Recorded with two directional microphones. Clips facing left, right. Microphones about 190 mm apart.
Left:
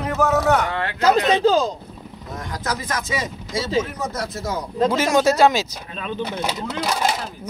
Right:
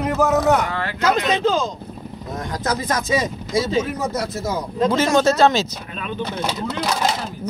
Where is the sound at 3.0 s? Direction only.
20° right (ahead or behind).